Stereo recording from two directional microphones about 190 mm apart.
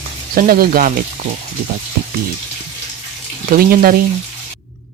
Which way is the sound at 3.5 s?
50° right (ahead or behind).